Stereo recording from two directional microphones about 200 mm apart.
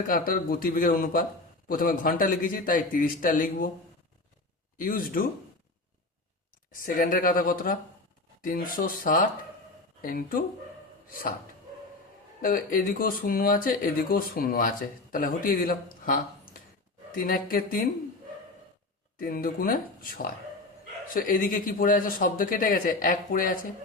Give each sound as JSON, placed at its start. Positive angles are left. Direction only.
{"t": 0.1, "sound": "a man's voice", "side_deg": 45}
{"t": 4.8, "sound": "a man's voice", "side_deg": 45}
{"t": 6.7, "sound": "a man's voice", "side_deg": 45}
{"t": 12.4, "sound": "a man's voice", "side_deg": 45}
{"t": 19.2, "sound": "a man's voice", "side_deg": 45}